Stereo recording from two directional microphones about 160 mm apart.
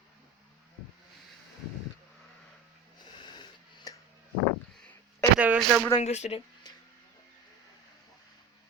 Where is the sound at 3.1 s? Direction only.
25° left (ahead or behind).